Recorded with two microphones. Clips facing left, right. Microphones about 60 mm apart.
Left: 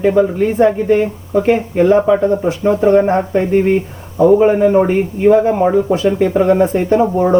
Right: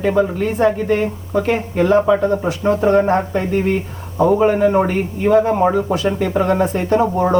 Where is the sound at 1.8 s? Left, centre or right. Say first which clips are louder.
Left 2 dB; left.